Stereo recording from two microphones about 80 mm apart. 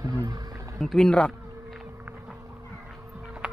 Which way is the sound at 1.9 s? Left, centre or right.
Right.